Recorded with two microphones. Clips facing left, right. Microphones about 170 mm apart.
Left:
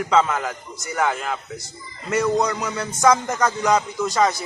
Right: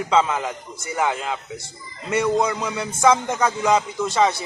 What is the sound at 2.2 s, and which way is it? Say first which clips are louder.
Speech: even; 10° right (ahead or behind).